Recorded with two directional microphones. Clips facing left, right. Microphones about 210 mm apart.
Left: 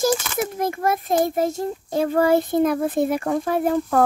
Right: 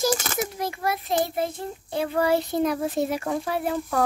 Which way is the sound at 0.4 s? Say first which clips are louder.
Left 5 dB; 50° left (ahead or behind).